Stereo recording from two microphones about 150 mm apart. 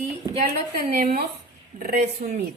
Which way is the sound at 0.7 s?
90° right.